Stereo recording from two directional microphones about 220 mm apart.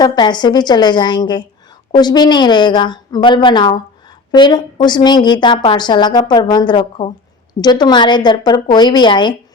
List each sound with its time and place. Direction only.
0.0 s a woman's voice: 20° left (ahead or behind)